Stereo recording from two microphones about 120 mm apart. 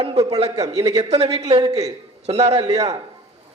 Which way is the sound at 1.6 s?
30° right (ahead or behind).